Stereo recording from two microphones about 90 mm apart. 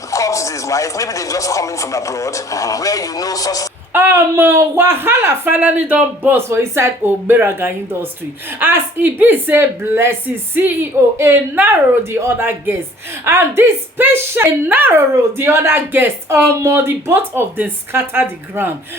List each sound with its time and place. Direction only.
0.1 s speech: 35° left (ahead or behind)
3.9 s speech: 25° right (ahead or behind)